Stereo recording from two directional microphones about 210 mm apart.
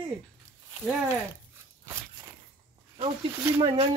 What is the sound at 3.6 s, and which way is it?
Speech, 25° right (ahead or behind).